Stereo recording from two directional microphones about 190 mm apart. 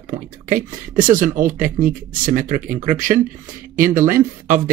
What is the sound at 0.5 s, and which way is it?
Speech, 45° right (ahead or behind).